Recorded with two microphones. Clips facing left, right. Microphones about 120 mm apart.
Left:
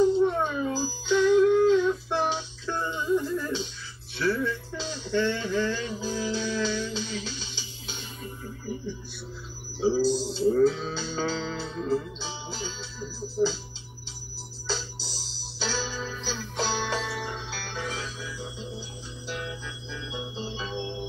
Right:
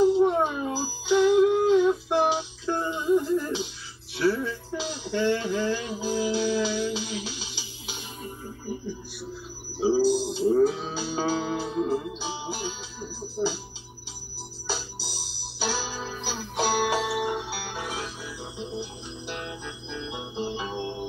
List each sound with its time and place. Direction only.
0.0 s music: 15° right (ahead or behind)
9.8 s a sound: 10° right (ahead or behind)
10.6 s music: 15° right (ahead or behind)
14.7 s music: 10° right (ahead or behind)
20.7 s music: 45° right (ahead or behind)